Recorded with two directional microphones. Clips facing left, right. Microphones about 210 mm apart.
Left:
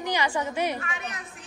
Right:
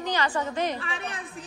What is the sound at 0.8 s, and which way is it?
Speech, 30° right (ahead or behind).